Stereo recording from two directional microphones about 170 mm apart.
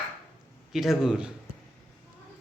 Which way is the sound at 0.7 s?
Centre (ahead or behind).